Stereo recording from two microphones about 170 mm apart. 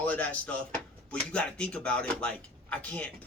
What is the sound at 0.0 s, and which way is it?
Speech, 10° left (ahead or behind).